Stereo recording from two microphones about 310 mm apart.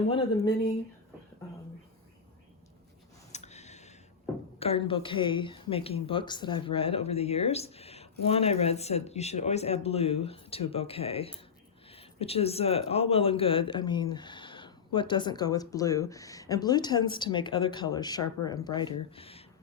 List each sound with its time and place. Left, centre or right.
0.1 s speech: centre
3.3 s a sound: left
4.6 s a woman's voice: centre